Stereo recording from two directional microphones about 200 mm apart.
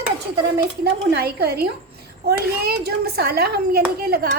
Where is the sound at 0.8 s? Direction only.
50° right (ahead or behind).